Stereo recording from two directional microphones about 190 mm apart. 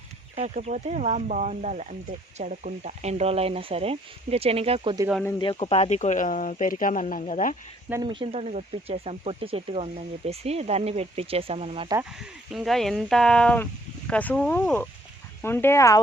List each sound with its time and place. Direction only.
0.3 s speech: 35° right (ahead or behind)
5.4 s speech: 30° left (ahead or behind)
8.0 s speech: 25° right (ahead or behind)
12.2 s speech: centre (ahead or behind); by 16.0 s 15° left (ahead or behind)